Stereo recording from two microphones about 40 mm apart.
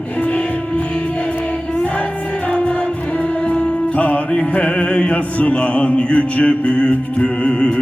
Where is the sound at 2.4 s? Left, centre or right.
Left.